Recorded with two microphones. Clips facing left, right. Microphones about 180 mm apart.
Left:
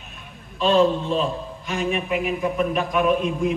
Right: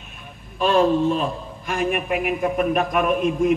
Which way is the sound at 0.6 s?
50° right (ahead or behind).